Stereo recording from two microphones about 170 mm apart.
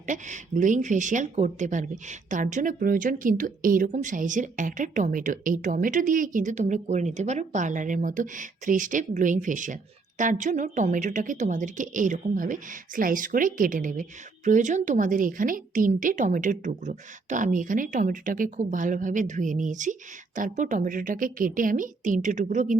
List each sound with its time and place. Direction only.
0.0 s a woman's voice: 45° right (ahead or behind)